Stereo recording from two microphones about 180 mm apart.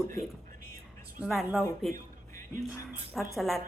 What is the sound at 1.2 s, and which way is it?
Speech, centre (ahead or behind).